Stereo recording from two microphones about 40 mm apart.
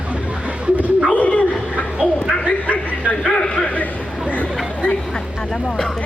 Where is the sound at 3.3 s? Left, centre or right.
Left.